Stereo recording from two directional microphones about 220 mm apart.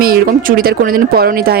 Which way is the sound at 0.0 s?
40° right (ahead or behind).